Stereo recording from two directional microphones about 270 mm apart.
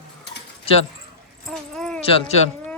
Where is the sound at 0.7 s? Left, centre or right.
Left.